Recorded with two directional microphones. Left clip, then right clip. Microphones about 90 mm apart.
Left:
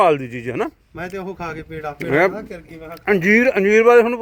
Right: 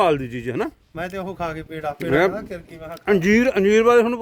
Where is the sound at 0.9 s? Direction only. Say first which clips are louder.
Even; 90° right.